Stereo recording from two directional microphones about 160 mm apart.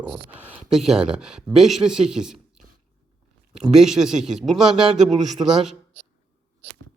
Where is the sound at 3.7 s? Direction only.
Centre (ahead or behind).